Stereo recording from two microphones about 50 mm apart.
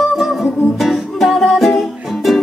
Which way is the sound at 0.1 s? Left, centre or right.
Centre.